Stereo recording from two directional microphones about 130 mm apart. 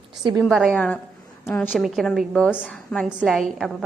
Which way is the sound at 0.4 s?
5° right (ahead or behind).